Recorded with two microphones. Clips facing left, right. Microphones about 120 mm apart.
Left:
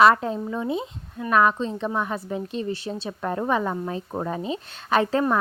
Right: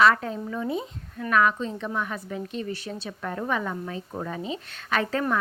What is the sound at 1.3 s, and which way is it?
A woman's voice, 35° left (ahead or behind).